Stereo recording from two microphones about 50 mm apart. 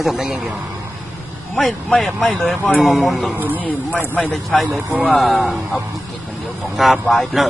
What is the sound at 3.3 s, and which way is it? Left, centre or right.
Speech, right.